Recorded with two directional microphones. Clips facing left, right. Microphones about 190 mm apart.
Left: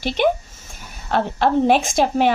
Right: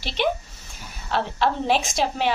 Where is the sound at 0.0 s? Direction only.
50° left (ahead or behind).